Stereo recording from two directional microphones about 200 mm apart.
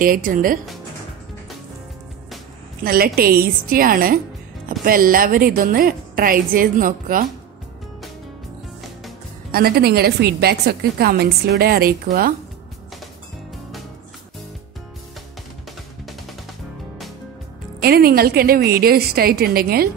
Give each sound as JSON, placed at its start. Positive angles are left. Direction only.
{"t": 0.0, "sound": "a woman's voice", "side_deg": -45}
{"t": 2.8, "sound": "a woman's voice", "side_deg": -50}
{"t": 9.5, "sound": "a woman's voice", "side_deg": -50}
{"t": 17.8, "sound": "a woman's voice", "side_deg": -50}